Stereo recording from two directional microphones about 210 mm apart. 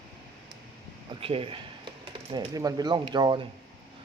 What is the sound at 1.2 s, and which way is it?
Speech, 25° right (ahead or behind).